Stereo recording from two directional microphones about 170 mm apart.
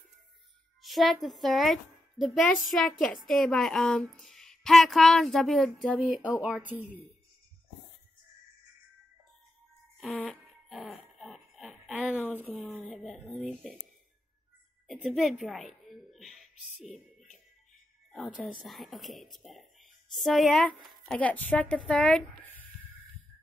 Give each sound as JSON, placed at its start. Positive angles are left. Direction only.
{"t": 0.8, "sound": "a woman's voice", "side_deg": 0}
{"t": 9.9, "sound": "fart", "side_deg": 0}
{"t": 12.4, "sound": "a woman's voice", "side_deg": 5}
{"t": 14.9, "sound": "a sound", "side_deg": -5}
{"t": 15.1, "sound": "a woman's voice", "side_deg": 0}
{"t": 16.8, "sound": "music", "side_deg": 45}
{"t": 18.1, "sound": "speech", "side_deg": 0}